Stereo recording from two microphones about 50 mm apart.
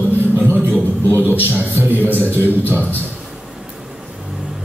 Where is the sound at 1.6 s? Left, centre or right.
Right.